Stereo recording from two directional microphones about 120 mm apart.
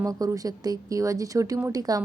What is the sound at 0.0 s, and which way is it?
A woman's voice, 30° right (ahead or behind).